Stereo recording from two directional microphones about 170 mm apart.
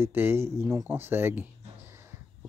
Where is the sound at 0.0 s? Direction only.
15° right (ahead or behind).